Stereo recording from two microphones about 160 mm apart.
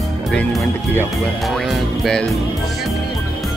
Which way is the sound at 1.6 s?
Centre (ahead or behind).